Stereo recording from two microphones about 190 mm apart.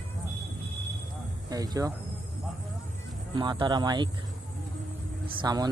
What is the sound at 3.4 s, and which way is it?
Speech, 25° right (ahead or behind).